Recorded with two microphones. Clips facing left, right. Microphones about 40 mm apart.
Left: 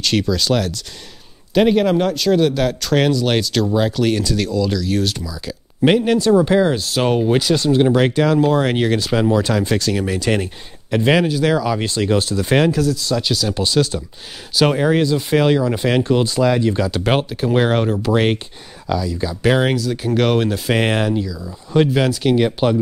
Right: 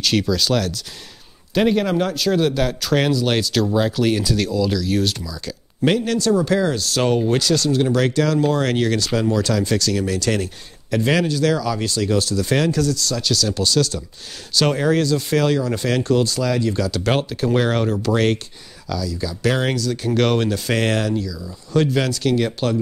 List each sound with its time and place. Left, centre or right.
0.0 s a man's voice: centre
5.9 s speech: centre
12.7 s speech: centre
18.9 s speech: left